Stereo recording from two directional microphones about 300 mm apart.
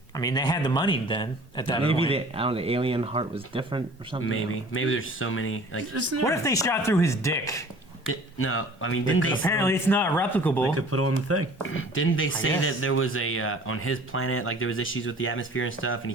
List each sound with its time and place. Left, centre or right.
0.2 s speech: centre
1.8 s speech: centre
4.2 s speech: left
5.9 s speech: right
6.2 s speech: centre
8.0 s speech: left
9.4 s speech: centre
10.8 s speech: right
11.7 s speech: left